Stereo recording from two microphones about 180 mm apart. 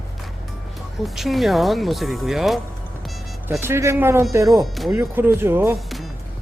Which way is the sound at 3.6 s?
15° right (ahead or behind).